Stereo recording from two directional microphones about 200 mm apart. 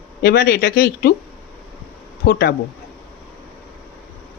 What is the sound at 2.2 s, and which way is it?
Speech, 55° left (ahead or behind).